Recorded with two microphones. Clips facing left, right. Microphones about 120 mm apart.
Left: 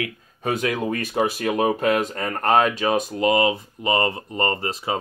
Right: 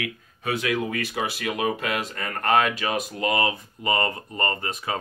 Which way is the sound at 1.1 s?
20° left (ahead or behind).